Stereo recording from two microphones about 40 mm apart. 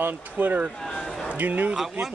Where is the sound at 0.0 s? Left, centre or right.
Right.